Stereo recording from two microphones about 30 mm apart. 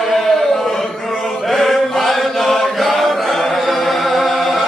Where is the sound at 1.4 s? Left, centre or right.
Centre.